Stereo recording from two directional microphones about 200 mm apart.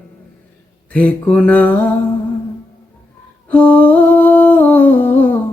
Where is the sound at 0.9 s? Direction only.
5° left (ahead or behind).